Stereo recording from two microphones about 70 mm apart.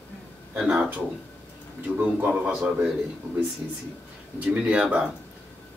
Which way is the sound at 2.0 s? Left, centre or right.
Right.